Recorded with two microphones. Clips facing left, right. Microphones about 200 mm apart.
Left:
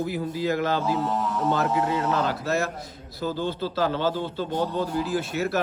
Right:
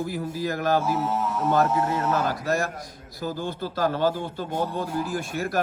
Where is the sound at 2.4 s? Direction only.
50° right (ahead or behind).